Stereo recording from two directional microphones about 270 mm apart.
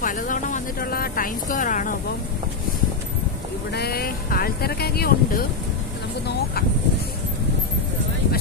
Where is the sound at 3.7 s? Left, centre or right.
Left.